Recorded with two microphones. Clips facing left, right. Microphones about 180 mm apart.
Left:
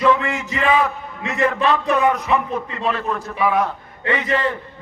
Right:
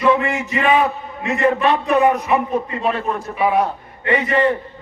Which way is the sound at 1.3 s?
35° right (ahead or behind).